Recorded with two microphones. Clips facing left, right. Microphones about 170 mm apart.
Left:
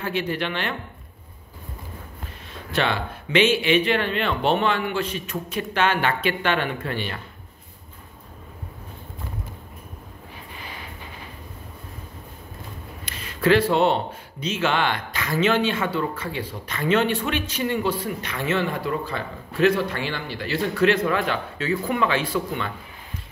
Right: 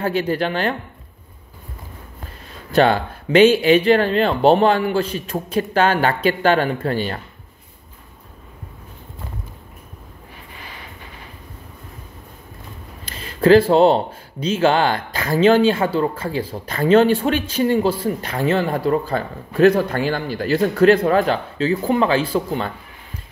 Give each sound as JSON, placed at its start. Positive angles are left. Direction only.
{"t": 0.0, "sound": "a man's voice", "side_deg": -40}
{"t": 2.7, "sound": "a man's voice", "side_deg": -40}
{"t": 13.0, "sound": "a man's voice", "side_deg": -35}